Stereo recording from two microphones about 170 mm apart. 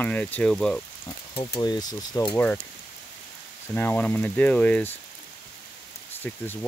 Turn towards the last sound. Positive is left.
turn(degrees=10)  # may be behind; listen again after turning